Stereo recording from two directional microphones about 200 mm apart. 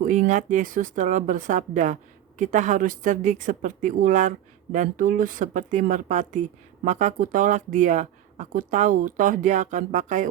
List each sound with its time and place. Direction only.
0.0 s a woman's voice: 40° right (ahead or behind)